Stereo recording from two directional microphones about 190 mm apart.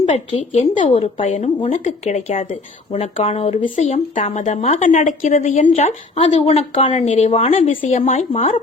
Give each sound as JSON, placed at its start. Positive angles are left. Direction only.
{"t": 0.0, "sound": "speech", "side_deg": 40}